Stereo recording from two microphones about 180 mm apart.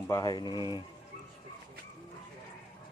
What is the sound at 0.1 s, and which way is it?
Speech, 20° left (ahead or behind).